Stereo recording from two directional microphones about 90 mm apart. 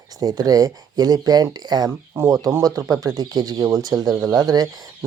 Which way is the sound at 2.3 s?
35° right (ahead or behind).